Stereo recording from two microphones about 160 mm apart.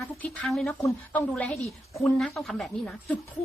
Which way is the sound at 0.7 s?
15° left (ahead or behind).